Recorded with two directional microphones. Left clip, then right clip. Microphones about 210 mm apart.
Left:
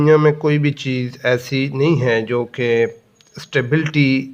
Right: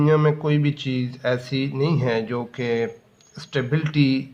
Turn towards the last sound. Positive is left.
turn(degrees=35)  # may be behind; listen again after turning